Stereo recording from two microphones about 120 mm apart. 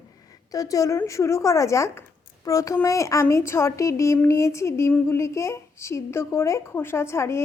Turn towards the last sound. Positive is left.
turn(degrees=20)  # may be behind; listen again after turning